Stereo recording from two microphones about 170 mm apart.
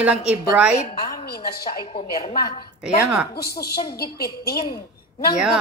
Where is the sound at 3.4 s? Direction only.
70° left (ahead or behind).